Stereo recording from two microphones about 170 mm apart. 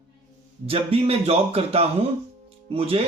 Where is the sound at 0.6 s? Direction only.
35° right (ahead or behind).